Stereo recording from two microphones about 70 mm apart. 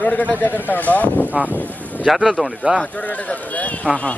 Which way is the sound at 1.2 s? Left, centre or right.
Right.